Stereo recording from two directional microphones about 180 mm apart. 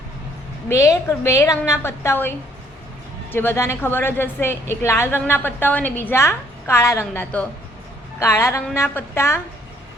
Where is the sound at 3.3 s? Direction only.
10° left (ahead or behind).